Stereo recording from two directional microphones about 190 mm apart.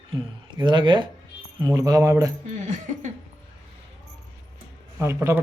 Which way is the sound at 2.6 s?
40° right (ahead or behind).